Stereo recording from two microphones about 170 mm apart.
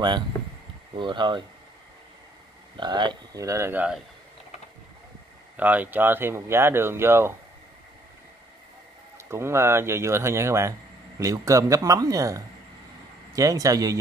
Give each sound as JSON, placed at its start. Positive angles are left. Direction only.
{"t": 0.9, "sound": "speech", "side_deg": -25}
{"t": 2.8, "sound": "speech", "side_deg": -25}
{"t": 5.6, "sound": "speech", "side_deg": -10}
{"t": 9.3, "sound": "speech", "side_deg": -15}